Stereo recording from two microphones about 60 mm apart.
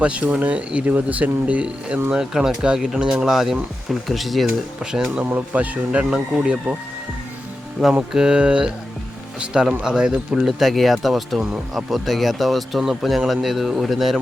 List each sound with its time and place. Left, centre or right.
0.0 s speech: centre
5.2 s speech: right
8.1 s speech: centre
10.4 s speech: centre